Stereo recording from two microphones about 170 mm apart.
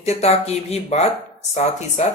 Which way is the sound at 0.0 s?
40° left (ahead or behind).